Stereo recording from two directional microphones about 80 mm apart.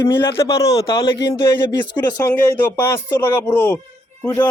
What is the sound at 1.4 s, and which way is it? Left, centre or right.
Speech, left.